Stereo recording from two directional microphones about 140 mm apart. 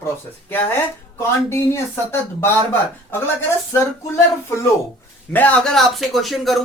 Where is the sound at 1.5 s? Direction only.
20° left (ahead or behind).